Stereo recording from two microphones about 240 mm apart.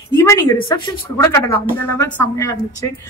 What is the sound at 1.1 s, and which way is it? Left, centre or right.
A woman's voice, centre.